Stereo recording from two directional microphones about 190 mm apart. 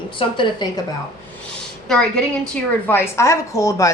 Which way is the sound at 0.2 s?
25° left (ahead or behind).